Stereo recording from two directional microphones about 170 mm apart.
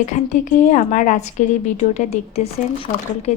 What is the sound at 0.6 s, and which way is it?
A woman's voice, 45° left (ahead or behind).